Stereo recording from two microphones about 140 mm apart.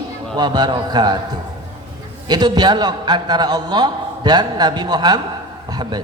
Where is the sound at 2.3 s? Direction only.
30° right (ahead or behind).